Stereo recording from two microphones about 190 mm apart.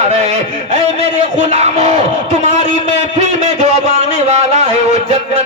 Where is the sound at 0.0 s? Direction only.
35° right (ahead or behind).